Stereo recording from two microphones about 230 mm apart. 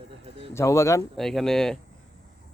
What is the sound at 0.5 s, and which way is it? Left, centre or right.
Speech, centre.